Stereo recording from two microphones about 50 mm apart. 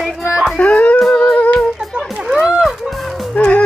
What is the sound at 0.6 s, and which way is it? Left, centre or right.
Music, left.